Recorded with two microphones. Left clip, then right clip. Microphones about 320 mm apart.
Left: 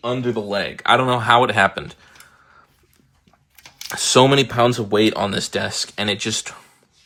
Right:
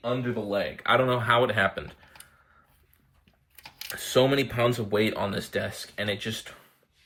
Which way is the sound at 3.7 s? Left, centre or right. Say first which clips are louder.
Left 9 dB; centre.